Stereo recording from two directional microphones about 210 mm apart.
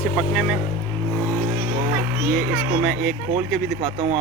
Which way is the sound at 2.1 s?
10° right (ahead or behind).